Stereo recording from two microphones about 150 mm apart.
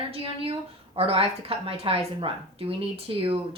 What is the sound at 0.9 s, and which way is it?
Speech, 40° right (ahead or behind).